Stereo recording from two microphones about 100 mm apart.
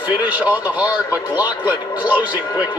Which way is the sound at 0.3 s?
15° right (ahead or behind).